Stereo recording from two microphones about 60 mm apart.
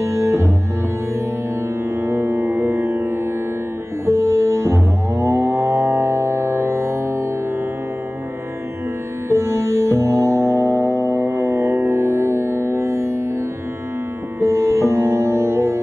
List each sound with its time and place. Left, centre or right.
0.0 s music: right
2.0 s music: right
9.3 s music: right
14.4 s music: right